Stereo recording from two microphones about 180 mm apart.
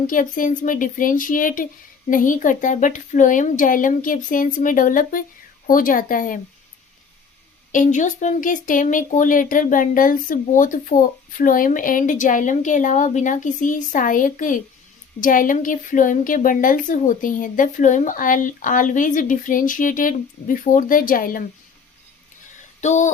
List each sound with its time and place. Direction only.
0.1 s speech: 50° left (ahead or behind)
7.7 s speech: 45° left (ahead or behind)
22.8 s speech: 40° left (ahead or behind)